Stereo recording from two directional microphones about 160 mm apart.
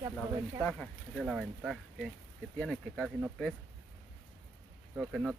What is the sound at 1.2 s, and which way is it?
Speech, 5° right (ahead or behind).